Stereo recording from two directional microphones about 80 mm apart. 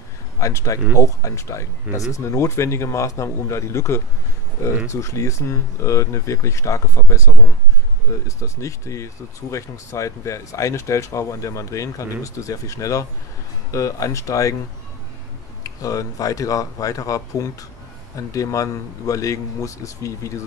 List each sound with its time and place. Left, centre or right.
0.4 s a man's voice: left
8.3 s a man's voice: left
15.6 s a man's voice: left